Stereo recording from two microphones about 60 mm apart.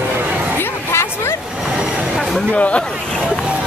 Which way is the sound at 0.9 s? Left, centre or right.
Left.